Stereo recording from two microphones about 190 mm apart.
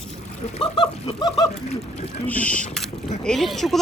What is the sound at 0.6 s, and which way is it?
Speech, 25° left (ahead or behind).